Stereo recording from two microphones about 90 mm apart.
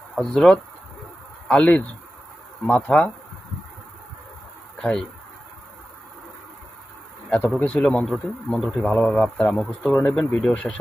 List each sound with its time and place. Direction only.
0.2 s a man's voice: 5° left (ahead or behind)
4.8 s speech: 10° left (ahead or behind)
7.3 s a man's voice: 15° left (ahead or behind)
9.1 s a man's voice: 10° left (ahead or behind)
10.0 s a man's voice: 15° left (ahead or behind)